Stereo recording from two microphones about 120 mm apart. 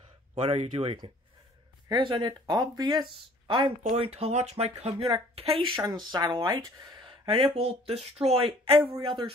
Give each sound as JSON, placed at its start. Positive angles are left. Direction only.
{"t": 0.3, "sound": "speech", "side_deg": -55}
{"t": 1.9, "sound": "speech", "side_deg": -35}
{"t": 4.0, "sound": "speech", "side_deg": -60}
{"t": 5.8, "sound": "speech", "side_deg": -35}